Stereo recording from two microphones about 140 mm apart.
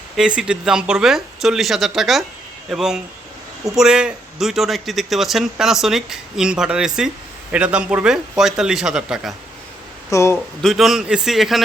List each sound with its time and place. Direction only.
0.2 s a man's voice: 5° right (ahead or behind)
10.1 s speech: 20° left (ahead or behind)
10.3 s a man's voice: centre (ahead or behind)